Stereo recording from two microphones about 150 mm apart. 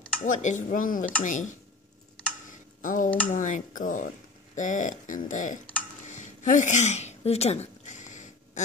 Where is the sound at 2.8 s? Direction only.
60° left (ahead or behind).